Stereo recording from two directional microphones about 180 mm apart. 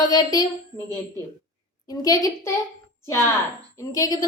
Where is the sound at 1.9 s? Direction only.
20° left (ahead or behind).